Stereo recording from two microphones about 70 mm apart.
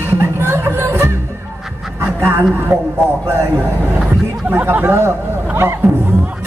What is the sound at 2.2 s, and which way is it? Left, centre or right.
Speech, right.